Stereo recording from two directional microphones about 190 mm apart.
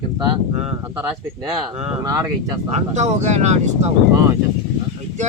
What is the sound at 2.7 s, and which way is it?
Speech, 35° right (ahead or behind).